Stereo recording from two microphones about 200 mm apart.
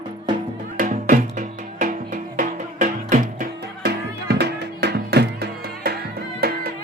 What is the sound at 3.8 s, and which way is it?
Music, 55° right (ahead or behind).